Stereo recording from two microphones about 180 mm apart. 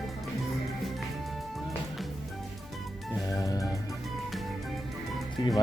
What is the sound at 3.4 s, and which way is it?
Music, 20° left (ahead or behind).